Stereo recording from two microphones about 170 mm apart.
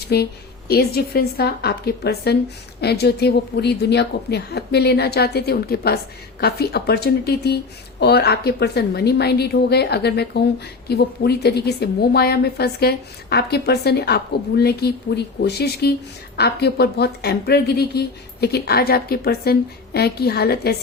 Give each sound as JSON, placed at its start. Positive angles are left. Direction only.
{"t": 0.1, "sound": "speech", "side_deg": 70}